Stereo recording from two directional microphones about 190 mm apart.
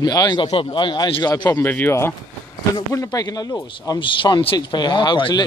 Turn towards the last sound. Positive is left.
turn(degrees=25)  # may be behind; listen again after turning